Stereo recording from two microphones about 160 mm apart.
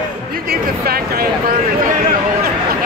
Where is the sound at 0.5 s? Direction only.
70° right (ahead or behind).